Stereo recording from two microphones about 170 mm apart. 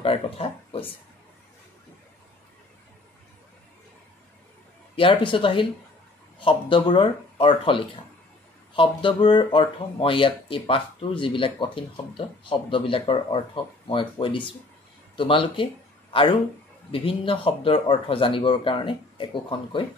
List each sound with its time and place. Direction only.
0.0 s speech: 30° left (ahead or behind)
4.9 s speech: 30° left (ahead or behind)